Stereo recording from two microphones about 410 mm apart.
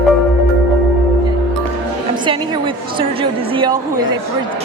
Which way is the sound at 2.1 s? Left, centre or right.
Centre.